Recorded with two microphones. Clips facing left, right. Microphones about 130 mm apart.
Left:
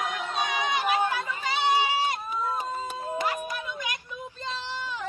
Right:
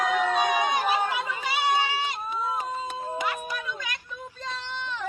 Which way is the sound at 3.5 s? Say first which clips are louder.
Even; 20° left (ahead or behind).